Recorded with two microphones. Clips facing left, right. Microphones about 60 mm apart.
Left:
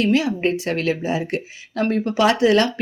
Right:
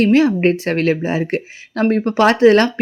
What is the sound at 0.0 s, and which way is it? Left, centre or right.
Speech, right.